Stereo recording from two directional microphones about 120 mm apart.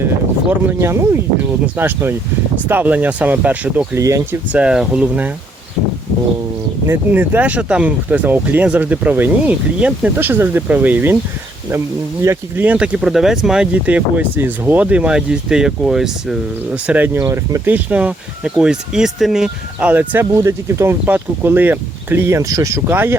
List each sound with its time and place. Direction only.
0.6 s speech: 20° right (ahead or behind)
3.9 s speech: 25° right (ahead or behind)
4.5 s speech: 5° right (ahead or behind)
6.8 s speech: 15° right (ahead or behind)
12.2 s speech: 25° right (ahead or behind)
12.6 s speech: 10° right (ahead or behind)
17.2 s speech: 25° right (ahead or behind)
17.7 s speech: 15° right (ahead or behind)
20.3 s speech: 25° right (ahead or behind)